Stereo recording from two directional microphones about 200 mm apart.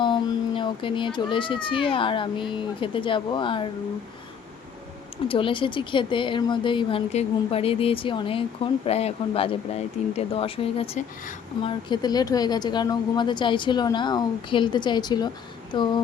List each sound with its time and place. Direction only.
0.0 s speech: 25° left (ahead or behind)
5.3 s a woman's voice: 25° left (ahead or behind)